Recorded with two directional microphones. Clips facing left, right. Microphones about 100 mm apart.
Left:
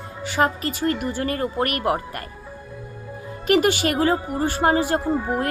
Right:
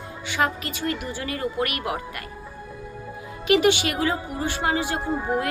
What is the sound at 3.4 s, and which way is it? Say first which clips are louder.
A woman's voice: left 1 dB; 45° left (ahead or behind).